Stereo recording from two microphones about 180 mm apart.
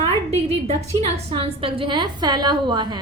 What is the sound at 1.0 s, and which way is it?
A woman's voice, 35° right (ahead or behind).